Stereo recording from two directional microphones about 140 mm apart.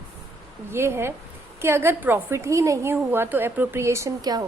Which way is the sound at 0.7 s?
15° right (ahead or behind).